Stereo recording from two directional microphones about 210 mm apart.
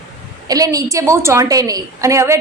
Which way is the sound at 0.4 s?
15° right (ahead or behind).